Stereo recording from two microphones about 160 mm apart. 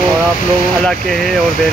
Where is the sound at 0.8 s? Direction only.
Centre (ahead or behind).